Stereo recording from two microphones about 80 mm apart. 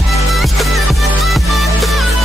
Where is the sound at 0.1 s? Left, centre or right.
Centre.